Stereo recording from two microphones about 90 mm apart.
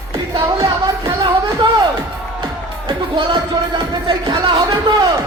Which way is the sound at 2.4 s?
75° right (ahead or behind).